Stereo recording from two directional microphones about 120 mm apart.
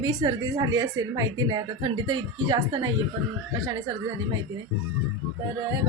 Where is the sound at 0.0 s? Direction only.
35° right (ahead or behind).